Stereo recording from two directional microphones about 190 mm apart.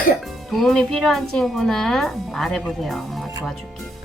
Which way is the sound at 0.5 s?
Centre (ahead or behind).